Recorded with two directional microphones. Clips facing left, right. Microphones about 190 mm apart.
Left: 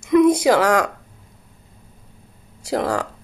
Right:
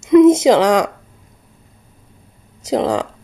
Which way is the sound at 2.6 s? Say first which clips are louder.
Right 4 dB; 20° right (ahead or behind).